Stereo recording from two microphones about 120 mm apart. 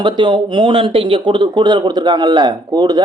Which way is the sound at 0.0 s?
40° right (ahead or behind).